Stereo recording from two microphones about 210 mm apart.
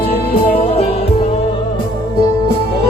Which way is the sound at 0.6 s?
30° left (ahead or behind).